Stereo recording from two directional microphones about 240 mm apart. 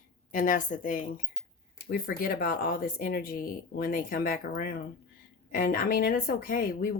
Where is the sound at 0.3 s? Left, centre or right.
Left.